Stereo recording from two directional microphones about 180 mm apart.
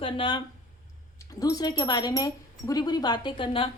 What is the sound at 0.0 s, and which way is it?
A woman's voice, 25° left (ahead or behind).